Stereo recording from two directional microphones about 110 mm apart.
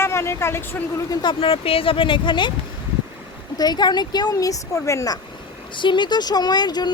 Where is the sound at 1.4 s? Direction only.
60° left (ahead or behind).